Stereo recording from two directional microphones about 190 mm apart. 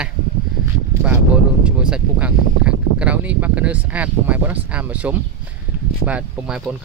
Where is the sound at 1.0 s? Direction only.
5° right (ahead or behind).